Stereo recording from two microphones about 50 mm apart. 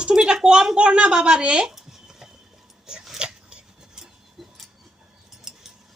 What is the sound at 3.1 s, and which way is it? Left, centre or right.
Scissors, centre.